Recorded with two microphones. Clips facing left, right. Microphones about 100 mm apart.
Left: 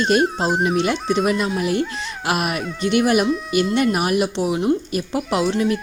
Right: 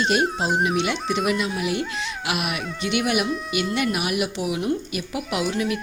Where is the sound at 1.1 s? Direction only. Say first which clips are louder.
Left 4 dB; 40° left (ahead or behind).